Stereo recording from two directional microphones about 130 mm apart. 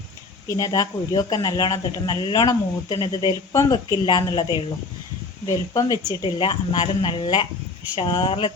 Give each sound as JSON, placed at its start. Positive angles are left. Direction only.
{"t": 0.4, "sound": "speech", "side_deg": 30}
{"t": 5.5, "sound": "a woman's voice", "side_deg": 30}